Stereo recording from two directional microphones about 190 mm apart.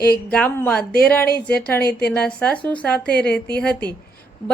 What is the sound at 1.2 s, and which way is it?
Speech, 55° left (ahead or behind).